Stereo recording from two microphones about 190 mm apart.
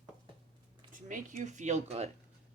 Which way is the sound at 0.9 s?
45° right (ahead or behind).